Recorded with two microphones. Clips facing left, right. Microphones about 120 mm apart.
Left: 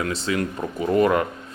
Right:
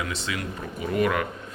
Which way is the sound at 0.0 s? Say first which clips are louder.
Left 7 dB; 40° left (ahead or behind).